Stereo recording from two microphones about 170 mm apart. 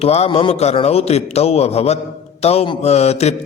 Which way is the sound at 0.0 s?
35° left (ahead or behind).